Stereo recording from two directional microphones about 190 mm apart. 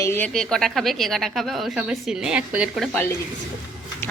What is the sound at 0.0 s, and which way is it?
A woman's voice, 10° left (ahead or behind).